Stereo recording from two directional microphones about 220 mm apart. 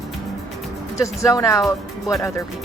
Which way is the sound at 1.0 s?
15° left (ahead or behind).